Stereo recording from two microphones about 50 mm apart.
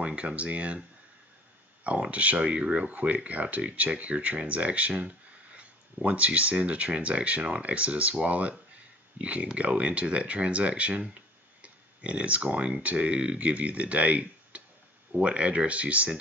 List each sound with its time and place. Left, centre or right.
0.0 s speech: right
1.9 s speech: right